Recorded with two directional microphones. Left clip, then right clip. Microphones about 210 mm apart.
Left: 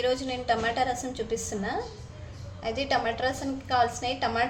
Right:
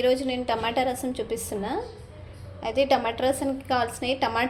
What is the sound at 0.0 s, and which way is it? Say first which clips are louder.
A woman's voice: right 4 dB; 30° right (ahead or behind).